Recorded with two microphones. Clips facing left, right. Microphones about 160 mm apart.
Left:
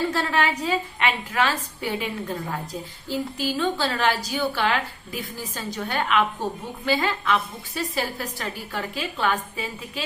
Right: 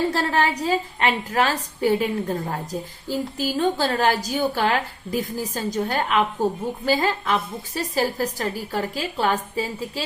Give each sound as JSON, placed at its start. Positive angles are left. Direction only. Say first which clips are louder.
{"t": 0.1, "sound": "a woman's voice", "louder": "right 2 dB", "side_deg": -35}